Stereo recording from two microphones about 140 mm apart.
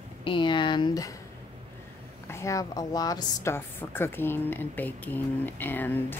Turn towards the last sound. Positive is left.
turn(degrees=15)  # may be behind; listen again after turning